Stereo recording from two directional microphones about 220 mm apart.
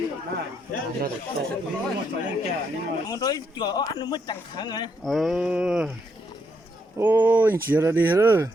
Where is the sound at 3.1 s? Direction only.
15° left (ahead or behind).